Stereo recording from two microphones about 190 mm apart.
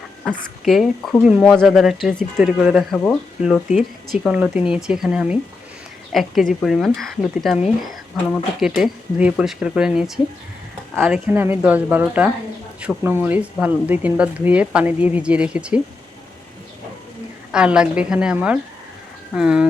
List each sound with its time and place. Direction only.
0.3 s speech: centre (ahead or behind)
3.7 s speech: 40° left (ahead or behind)
4.2 s speech: 5° right (ahead or behind)
17.5 s speech: 5° right (ahead or behind)